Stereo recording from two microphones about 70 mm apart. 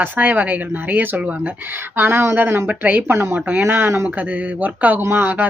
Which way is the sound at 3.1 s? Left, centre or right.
Right.